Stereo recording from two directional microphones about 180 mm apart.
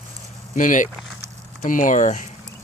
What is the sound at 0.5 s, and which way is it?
Speech, 45° left (ahead or behind).